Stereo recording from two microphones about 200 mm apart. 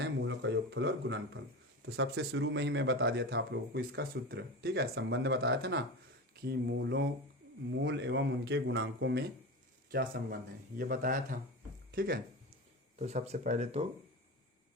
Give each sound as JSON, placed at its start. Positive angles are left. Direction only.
{"t": 0.0, "sound": "a man's voice", "side_deg": -65}
{"t": 9.9, "sound": "speech", "side_deg": -50}
{"t": 13.0, "sound": "speech", "side_deg": -35}